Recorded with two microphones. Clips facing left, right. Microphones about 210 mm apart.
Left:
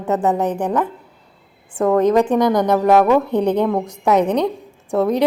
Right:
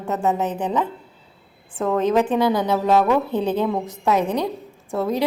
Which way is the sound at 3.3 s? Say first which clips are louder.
Left 4 dB; 15° left (ahead or behind).